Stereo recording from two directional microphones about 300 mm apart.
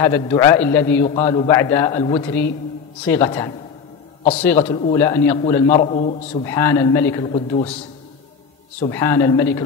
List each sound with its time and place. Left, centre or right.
0.0 s a man's voice: centre
4.6 s a man's voice: centre
4.9 s a man's voice: centre
7.2 s a man's voice: left
8.8 s a man's voice: centre